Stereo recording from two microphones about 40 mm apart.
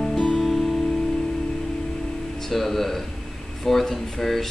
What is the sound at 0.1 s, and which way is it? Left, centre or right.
Music, left.